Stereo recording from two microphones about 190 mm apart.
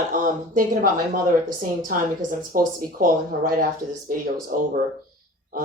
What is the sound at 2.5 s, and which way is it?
Speech, 50° right (ahead or behind).